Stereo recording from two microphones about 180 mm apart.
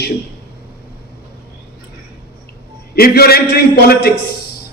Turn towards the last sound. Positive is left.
turn(degrees=60)  # may be behind; listen again after turning